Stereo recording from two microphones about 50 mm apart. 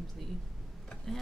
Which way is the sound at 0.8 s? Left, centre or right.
Centre.